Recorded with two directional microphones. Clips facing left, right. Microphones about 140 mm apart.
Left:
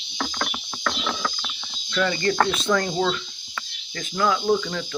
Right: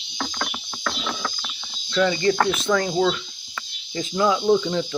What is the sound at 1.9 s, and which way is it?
Speech, 5° right (ahead or behind).